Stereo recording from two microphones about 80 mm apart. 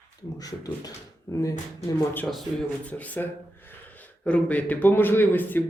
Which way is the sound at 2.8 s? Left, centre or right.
Centre.